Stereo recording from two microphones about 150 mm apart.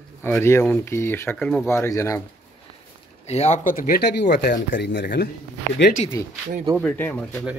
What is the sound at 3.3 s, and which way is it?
Speech, 50° left (ahead or behind).